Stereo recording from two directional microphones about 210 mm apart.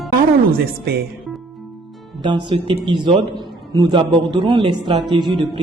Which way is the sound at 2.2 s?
20° right (ahead or behind).